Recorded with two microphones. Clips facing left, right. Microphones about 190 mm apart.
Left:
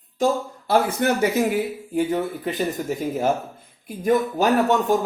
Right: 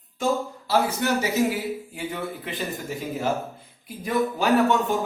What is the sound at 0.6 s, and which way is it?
Speech, 50° left (ahead or behind).